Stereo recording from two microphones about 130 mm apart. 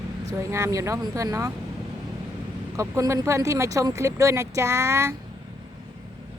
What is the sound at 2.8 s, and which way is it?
Speech, 25° right (ahead or behind).